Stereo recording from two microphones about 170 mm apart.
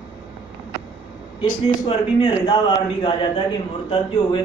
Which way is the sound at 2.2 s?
30° left (ahead or behind).